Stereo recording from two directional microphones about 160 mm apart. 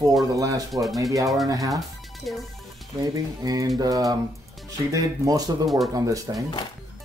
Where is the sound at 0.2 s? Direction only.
20° right (ahead or behind).